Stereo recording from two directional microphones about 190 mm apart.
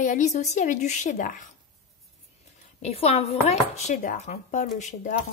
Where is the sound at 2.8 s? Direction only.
35° left (ahead or behind).